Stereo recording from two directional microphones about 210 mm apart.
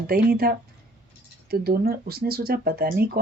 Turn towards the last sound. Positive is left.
turn(degrees=-45)  # may be behind; listen again after turning